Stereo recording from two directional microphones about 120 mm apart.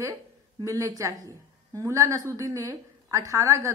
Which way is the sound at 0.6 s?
25° right (ahead or behind).